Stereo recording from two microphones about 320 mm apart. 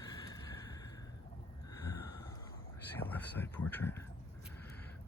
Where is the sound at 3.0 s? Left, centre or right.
Centre.